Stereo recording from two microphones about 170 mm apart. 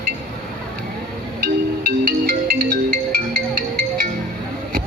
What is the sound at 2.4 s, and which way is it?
Music, 60° right (ahead or behind).